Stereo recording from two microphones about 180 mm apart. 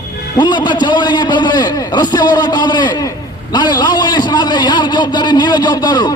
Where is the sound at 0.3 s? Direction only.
25° left (ahead or behind).